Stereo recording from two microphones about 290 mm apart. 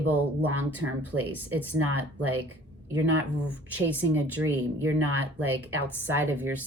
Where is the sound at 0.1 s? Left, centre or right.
Centre.